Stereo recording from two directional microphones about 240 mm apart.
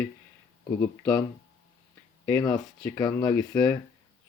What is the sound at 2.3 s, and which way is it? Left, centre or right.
Speech, centre.